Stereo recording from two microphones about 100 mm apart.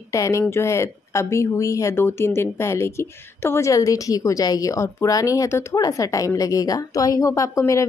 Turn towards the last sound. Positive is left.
turn(degrees=30)  # may be behind; listen again after turning